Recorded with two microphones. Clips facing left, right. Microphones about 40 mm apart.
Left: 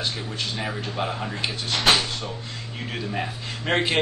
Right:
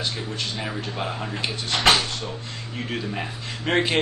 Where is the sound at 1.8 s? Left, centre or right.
Right.